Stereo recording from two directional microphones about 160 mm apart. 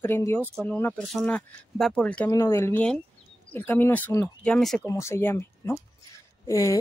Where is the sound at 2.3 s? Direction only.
20° left (ahead or behind).